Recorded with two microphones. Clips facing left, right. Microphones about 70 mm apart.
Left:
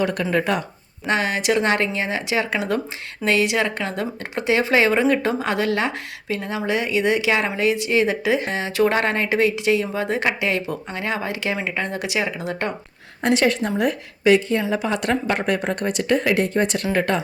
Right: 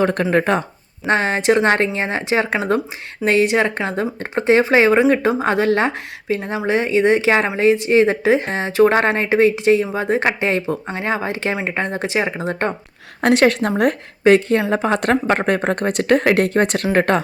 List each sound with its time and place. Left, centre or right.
0.0 s speech: right
13.2 s a woman's voice: right